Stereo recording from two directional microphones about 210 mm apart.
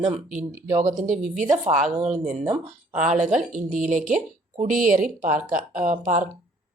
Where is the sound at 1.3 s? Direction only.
35° right (ahead or behind).